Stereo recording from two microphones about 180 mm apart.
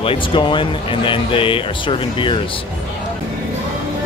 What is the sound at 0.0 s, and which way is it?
Speech, 30° left (ahead or behind).